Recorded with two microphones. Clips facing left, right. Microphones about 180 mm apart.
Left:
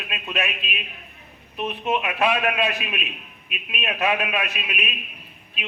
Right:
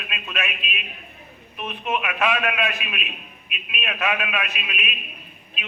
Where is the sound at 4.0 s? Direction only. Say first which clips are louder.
Left 2 dB; 35° left (ahead or behind).